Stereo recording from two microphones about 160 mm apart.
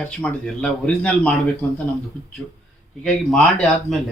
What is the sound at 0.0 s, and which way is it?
Speech, 10° left (ahead or behind).